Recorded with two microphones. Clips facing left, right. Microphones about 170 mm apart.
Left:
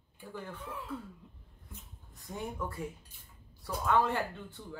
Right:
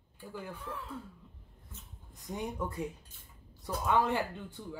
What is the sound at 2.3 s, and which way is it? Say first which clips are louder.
Speech: right 2 dB; 20° right (ahead or behind).